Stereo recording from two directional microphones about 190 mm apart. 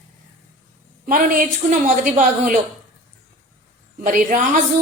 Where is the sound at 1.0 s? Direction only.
45° right (ahead or behind).